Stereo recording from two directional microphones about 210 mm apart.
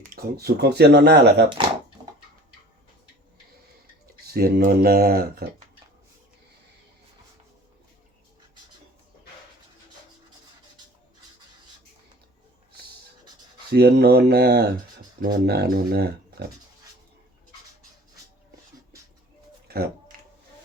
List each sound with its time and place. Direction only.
0.2 s speech: 50° right (ahead or behind)
4.3 s speech: 45° right (ahead or behind)
13.7 s speech: 50° right (ahead or behind)
19.6 s music: 50° right (ahead or behind)